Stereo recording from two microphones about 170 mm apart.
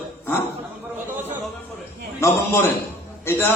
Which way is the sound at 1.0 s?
10° right (ahead or behind).